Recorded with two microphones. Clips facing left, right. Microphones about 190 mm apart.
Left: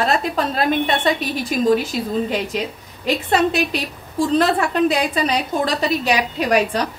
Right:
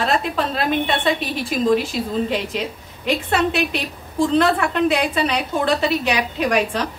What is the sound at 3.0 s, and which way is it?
A woman's voice, 40° left (ahead or behind).